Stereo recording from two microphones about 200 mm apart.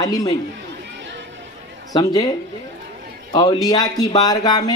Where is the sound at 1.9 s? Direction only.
20° left (ahead or behind).